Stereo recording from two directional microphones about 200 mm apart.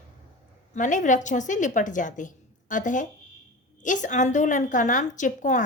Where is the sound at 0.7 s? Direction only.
40° left (ahead or behind).